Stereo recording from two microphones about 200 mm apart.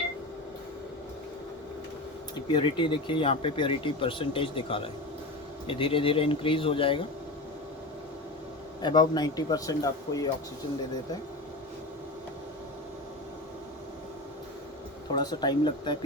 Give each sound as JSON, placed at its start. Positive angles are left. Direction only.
{"t": 2.3, "sound": "speech", "side_deg": 25}
{"t": 8.8, "sound": "speech", "side_deg": 20}
{"t": 15.1, "sound": "speech", "side_deg": 20}